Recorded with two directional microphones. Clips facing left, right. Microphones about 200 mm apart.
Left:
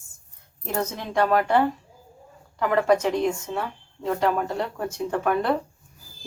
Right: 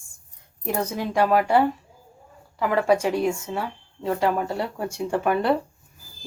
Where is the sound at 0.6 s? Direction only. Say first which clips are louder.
Right 2 dB; 10° right (ahead or behind).